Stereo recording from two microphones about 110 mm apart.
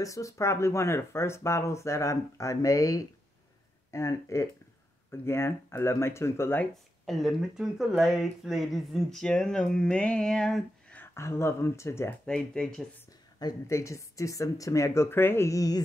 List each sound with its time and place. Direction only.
0.0 s speech: 30° left (ahead or behind)
6.7 s speech: centre (ahead or behind)
11.0 s speech: 25° left (ahead or behind)
12.3 s speech: 10° left (ahead or behind)
13.4 s speech: 30° left (ahead or behind)